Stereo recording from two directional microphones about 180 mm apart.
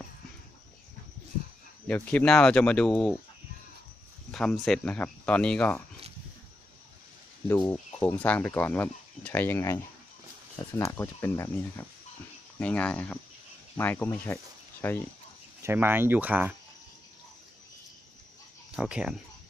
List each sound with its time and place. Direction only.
1.9 s speech: 10° left (ahead or behind)
4.3 s speech: 5° left (ahead or behind)
7.4 s speech: 15° left (ahead or behind)
15.6 s speech: 10° right (ahead or behind)
18.8 s speech: 5° right (ahead or behind)